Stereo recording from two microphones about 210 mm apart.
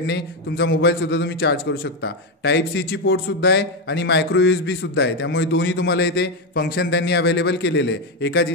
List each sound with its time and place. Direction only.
0.0 s a man's voice: 55° left (ahead or behind)